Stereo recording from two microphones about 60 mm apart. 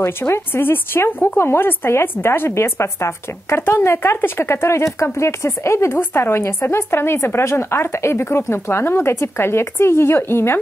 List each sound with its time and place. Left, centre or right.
0.0 s speech: left
5.9 s a woman's voice: left